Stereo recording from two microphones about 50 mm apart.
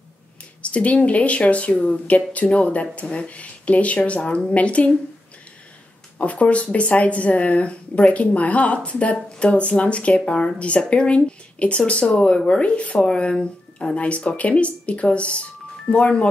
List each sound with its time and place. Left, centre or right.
0.6 s speech: left
6.1 s speech: left